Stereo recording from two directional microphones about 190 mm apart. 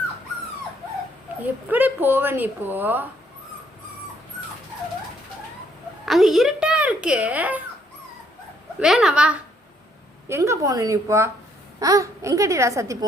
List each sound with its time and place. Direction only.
1.6 s speech: 10° right (ahead or behind)
6.1 s a child's voice: centre (ahead or behind)
8.8 s a child's voice: 5° right (ahead or behind)